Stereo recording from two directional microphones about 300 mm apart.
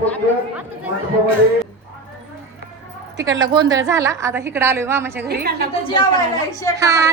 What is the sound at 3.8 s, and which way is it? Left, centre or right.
A woman's voice, centre.